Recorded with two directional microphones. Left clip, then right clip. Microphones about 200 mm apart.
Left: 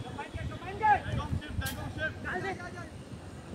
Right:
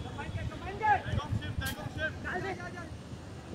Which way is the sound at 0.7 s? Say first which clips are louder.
Left 2 dB; 5° left (ahead or behind).